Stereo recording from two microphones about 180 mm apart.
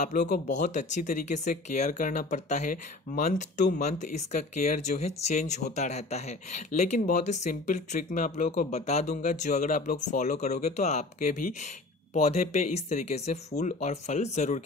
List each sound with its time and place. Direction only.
0.5 s speech: 45° left (ahead or behind)